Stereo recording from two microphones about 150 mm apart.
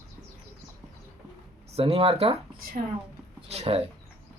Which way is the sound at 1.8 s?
40° right (ahead or behind).